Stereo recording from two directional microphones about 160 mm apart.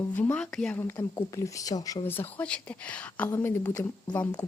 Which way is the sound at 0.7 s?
15° left (ahead or behind).